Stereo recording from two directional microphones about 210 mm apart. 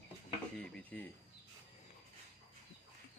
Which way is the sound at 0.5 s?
5° left (ahead or behind).